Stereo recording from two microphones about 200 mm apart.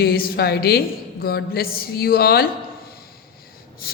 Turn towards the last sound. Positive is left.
turn(degrees=50)  # may be behind; listen again after turning